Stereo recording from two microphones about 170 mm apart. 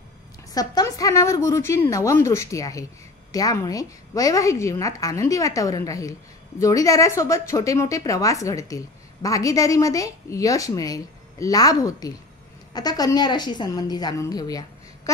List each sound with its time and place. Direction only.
0.6 s a woman's voice: 20° left (ahead or behind)